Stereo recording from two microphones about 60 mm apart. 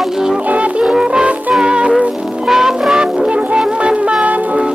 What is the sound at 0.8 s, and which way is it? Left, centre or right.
Music, centre.